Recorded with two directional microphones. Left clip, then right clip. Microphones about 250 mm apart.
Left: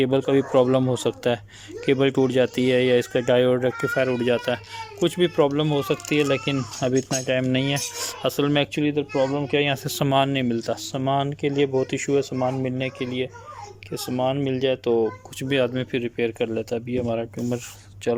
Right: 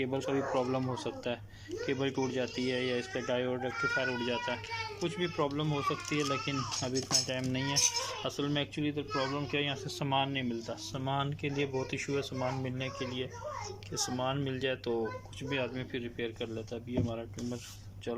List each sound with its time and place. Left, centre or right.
0.0 s speech: left
10.9 s speech: left
15.4 s speech: left